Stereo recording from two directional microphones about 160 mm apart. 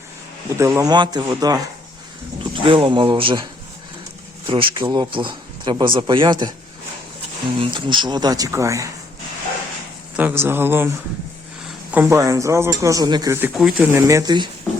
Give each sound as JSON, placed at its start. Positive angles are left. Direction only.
{"t": 0.6, "sound": "speech", "side_deg": -20}
{"t": 4.4, "sound": "speech", "side_deg": -35}
{"t": 7.6, "sound": "speech", "side_deg": -30}
{"t": 10.2, "sound": "speech", "side_deg": -10}
{"t": 13.6, "sound": "speech", "side_deg": -5}
{"t": 13.8, "sound": "speech", "side_deg": -20}